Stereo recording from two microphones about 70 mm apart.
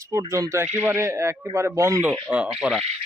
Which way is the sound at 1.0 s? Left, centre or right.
Right.